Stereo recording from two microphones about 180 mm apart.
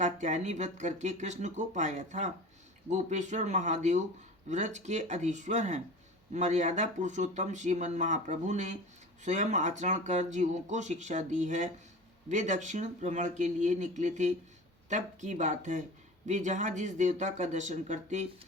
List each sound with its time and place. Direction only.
0.0 s speech: 40° right (ahead or behind)